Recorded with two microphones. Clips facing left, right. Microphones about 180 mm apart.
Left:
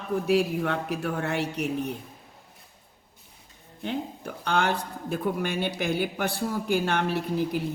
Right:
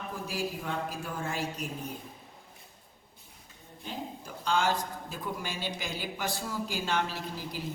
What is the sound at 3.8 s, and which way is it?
Speech, 60° left (ahead or behind).